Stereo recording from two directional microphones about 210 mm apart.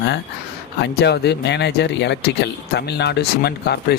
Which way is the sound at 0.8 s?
55° left (ahead or behind).